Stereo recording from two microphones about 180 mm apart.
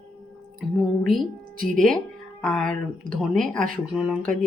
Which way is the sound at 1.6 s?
50° right (ahead or behind).